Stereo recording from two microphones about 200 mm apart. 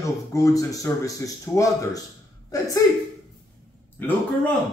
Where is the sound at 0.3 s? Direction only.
15° left (ahead or behind).